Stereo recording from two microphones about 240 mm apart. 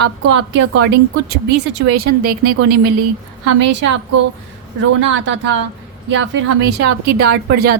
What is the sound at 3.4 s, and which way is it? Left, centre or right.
Speech, right.